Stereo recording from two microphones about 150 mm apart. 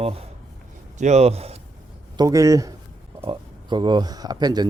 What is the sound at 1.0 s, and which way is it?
Speech, 50° right (ahead or behind).